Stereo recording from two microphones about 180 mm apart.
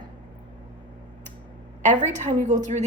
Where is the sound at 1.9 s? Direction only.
40° right (ahead or behind).